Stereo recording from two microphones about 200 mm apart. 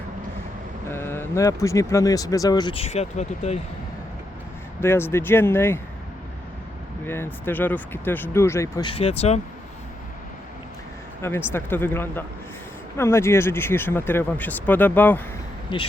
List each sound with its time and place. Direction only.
0.9 s speech: 10° left (ahead or behind); by 3.6 s 35° left (ahead or behind)
4.8 s speech: 10° left (ahead or behind)
7.0 s speech: 10° left (ahead or behind)
8.9 s speech: 30° left (ahead or behind)
11.2 s speech: 10° left (ahead or behind)
15.7 s speech: 25° left (ahead or behind)